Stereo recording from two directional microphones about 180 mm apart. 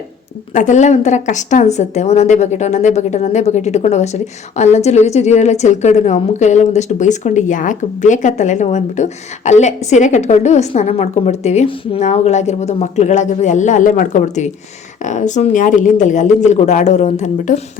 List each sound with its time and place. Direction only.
0.5 s a woman's voice: 40° left (ahead or behind)